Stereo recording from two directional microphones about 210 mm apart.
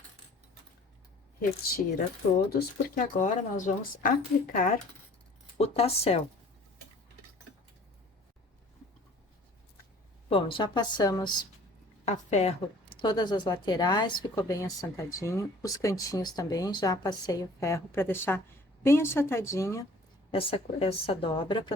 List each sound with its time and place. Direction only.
2.5 s speech: 45° left (ahead or behind)
5.5 s a woman's voice: 30° left (ahead or behind)
10.2 s a woman's voice: 25° left (ahead or behind)
12.0 s a woman's voice: 30° left (ahead or behind); by 19.8 s 15° left (ahead or behind)
20.3 s a woman's voice: 30° left (ahead or behind)